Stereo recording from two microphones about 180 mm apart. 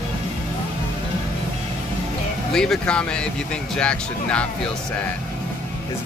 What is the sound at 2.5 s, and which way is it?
Speech, 5° left (ahead or behind).